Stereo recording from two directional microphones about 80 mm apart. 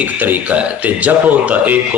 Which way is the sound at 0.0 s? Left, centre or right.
Right.